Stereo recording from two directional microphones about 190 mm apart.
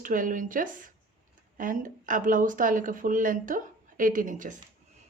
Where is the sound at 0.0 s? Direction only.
45° right (ahead or behind).